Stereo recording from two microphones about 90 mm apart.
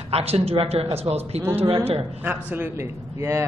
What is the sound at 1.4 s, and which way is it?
Speech, 30° right (ahead or behind).